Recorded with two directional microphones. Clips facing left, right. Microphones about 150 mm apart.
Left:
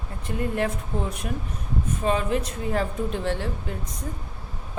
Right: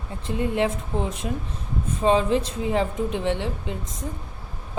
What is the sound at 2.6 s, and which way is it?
Speech, 15° right (ahead or behind).